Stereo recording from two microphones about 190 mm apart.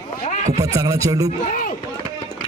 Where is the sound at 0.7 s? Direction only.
15° right (ahead or behind).